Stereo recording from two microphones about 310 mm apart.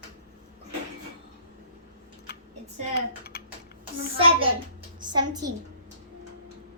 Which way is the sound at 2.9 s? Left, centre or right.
Left.